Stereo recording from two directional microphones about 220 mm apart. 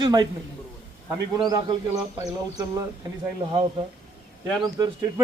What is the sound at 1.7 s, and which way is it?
Speech, 15° right (ahead or behind).